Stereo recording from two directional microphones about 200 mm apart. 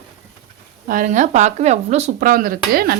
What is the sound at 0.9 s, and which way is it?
A woman's voice, 40° right (ahead or behind).